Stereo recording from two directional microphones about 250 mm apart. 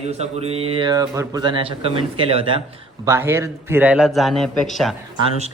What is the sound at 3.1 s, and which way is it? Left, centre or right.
A man's voice, centre.